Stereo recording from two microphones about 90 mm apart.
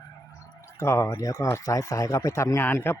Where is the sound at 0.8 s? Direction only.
30° left (ahead or behind).